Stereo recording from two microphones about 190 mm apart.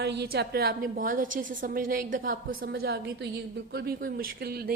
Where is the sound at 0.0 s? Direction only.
60° right (ahead or behind).